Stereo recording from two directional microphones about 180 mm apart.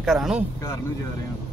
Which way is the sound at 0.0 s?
Centre (ahead or behind).